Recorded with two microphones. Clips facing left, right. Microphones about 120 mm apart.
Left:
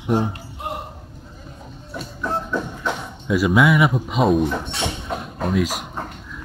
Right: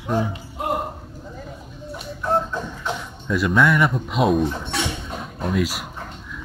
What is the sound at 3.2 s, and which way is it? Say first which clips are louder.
Speech: left 2 dB; 5° left (ahead or behind).